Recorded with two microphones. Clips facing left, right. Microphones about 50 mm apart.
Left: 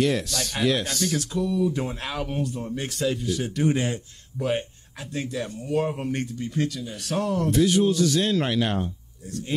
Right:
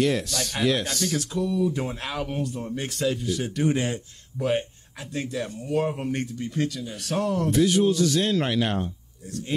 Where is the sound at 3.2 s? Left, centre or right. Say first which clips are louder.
Left 1 dB; right.